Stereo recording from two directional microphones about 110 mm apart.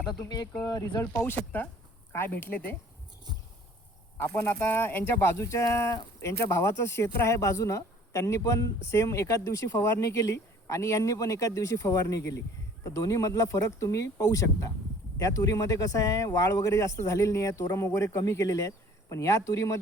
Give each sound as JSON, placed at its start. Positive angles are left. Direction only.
{"t": 0.0, "sound": "speech", "side_deg": 40}
{"t": 1.1, "sound": "speech", "side_deg": 20}
{"t": 3.3, "sound": "a sound", "side_deg": -40}
{"t": 4.6, "sound": "speech", "side_deg": 20}